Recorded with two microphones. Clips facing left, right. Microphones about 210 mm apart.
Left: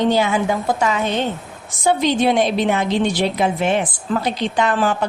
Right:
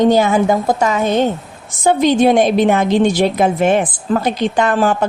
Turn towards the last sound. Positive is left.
turn(degrees=-45)  # may be behind; listen again after turning